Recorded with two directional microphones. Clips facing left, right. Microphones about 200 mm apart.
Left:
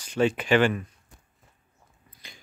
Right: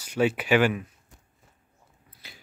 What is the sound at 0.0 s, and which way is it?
Speech, 10° right (ahead or behind).